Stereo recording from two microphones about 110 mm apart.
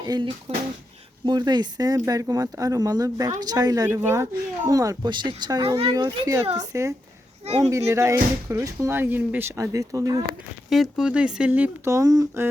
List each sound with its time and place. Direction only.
0.0 s speech: 35° right (ahead or behind)
0.5 s speech: 60° right (ahead or behind)
1.2 s speech: 40° right (ahead or behind)
3.8 s speech: 20° right (ahead or behind)
10.7 s speech: 5° right (ahead or behind)
11.9 s speech: 30° right (ahead or behind)